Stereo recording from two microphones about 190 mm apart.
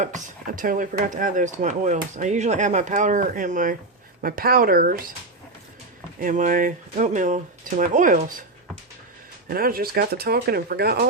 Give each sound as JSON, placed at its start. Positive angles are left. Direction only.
{"t": 0.0, "sound": "speech", "side_deg": -40}
{"t": 6.1, "sound": "speech", "side_deg": -45}
{"t": 9.5, "sound": "speech", "side_deg": -50}